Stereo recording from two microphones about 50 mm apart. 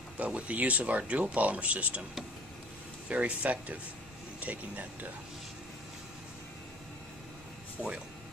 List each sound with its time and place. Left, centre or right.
0.2 s speech: right
3.1 s speech: right
7.8 s speech: centre